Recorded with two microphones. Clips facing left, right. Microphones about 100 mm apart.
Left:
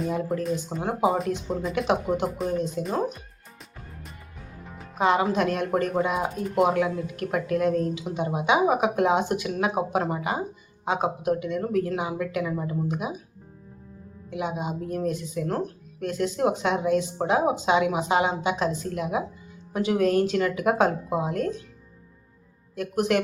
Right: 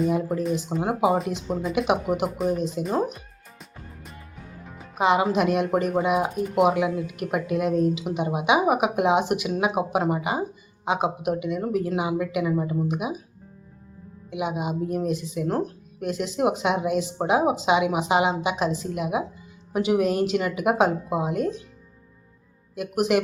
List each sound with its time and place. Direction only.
0.1 s speech: 15° right (ahead or behind)
2.8 s speech: 10° right (ahead or behind)
4.8 s music: 10° right (ahead or behind)
5.4 s speech: 10° right (ahead or behind)
14.3 s speech: 10° right (ahead or behind)
15.4 s speech: 30° right (ahead or behind)
16.0 s speech: 10° right (ahead or behind)
22.7 s speech: 10° right (ahead or behind)